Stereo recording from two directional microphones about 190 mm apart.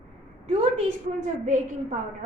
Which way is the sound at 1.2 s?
40° right (ahead or behind).